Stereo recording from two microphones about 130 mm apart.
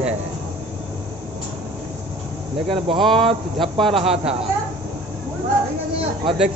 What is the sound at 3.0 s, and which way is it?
Speech, centre (ahead or behind).